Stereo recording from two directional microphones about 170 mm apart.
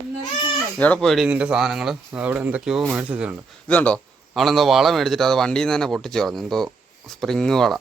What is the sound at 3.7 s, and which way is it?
A man's voice, 5° left (ahead or behind).